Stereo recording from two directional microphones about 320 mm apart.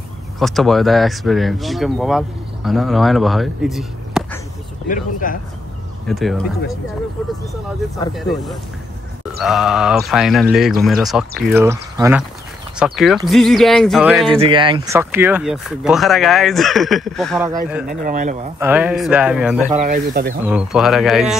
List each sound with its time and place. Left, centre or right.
0.4 s speech: centre
4.8 s speech: left
6.0 s speech: centre
8.1 s speech: centre
14.4 s speech: centre
18.0 s speech: right
18.6 s speech: centre
19.8 s speech: right
20.4 s speech: centre